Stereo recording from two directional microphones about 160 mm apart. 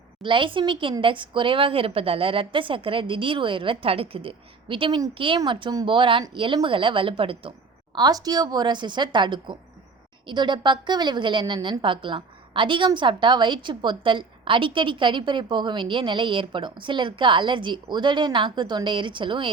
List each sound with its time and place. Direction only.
0.2 s a woman's voice: 30° right (ahead or behind)